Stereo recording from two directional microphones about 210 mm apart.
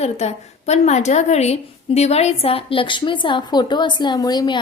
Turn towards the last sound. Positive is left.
turn(degrees=20)  # may be behind; listen again after turning